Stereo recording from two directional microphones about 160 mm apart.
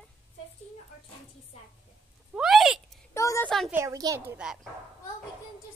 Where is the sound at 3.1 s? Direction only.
20° left (ahead or behind).